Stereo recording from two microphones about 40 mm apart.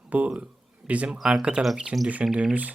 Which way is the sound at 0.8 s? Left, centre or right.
Centre.